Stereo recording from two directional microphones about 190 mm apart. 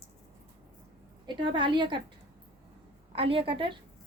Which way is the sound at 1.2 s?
25° right (ahead or behind).